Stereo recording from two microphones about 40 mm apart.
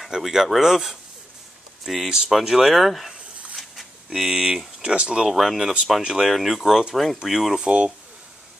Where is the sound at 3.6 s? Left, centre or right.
Centre.